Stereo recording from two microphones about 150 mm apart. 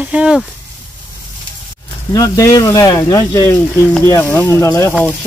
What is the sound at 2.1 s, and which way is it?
Speech, 25° left (ahead or behind).